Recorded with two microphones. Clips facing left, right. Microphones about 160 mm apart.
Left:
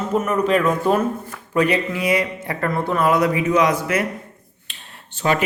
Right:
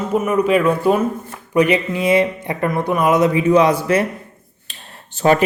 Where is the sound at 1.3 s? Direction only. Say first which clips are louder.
Right 5 dB; 20° right (ahead or behind).